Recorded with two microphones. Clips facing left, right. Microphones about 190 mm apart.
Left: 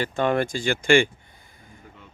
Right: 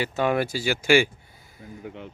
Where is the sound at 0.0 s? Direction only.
5° right (ahead or behind).